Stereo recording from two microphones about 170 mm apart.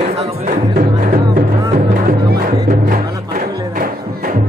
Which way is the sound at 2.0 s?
60° right (ahead or behind).